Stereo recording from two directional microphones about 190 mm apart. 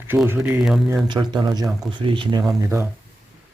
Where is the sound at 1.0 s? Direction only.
25° right (ahead or behind).